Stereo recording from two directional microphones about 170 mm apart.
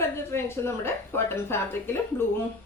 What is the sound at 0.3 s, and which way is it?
A woman's voice, 15° left (ahead or behind).